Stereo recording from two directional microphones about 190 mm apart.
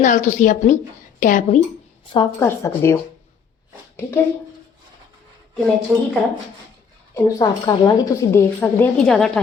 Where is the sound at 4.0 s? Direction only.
15° left (ahead or behind).